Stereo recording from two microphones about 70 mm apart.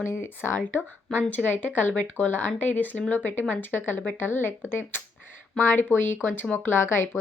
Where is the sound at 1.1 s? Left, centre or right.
Left.